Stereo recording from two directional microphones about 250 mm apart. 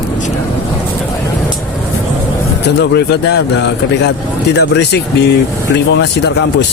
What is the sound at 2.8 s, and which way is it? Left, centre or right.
Speech, left.